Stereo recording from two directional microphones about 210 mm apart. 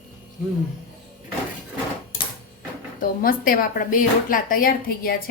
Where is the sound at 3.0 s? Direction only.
40° left (ahead or behind).